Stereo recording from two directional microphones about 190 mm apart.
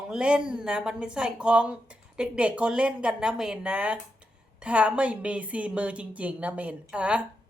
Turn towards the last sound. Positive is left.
turn(degrees=-5)  # may be behind; listen again after turning